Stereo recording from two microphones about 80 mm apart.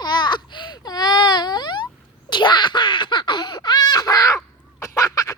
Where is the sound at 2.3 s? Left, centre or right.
Left.